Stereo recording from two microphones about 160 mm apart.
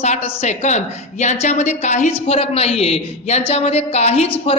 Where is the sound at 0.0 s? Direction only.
40° left (ahead or behind).